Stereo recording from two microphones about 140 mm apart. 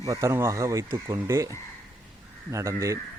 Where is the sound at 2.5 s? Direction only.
20° right (ahead or behind).